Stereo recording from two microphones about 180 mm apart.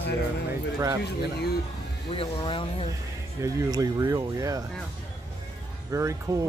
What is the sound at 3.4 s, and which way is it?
Speech, 20° right (ahead or behind).